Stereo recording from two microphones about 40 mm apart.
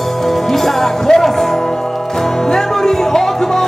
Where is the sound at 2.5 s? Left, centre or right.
Centre.